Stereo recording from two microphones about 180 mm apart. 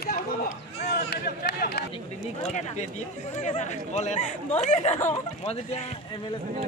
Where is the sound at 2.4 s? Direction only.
40° left (ahead or behind).